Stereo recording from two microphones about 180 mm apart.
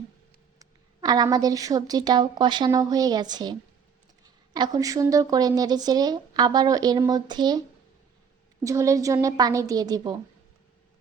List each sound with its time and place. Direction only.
0.6 s speech: 20° right (ahead or behind)
8.6 s a woman's voice: 15° right (ahead or behind)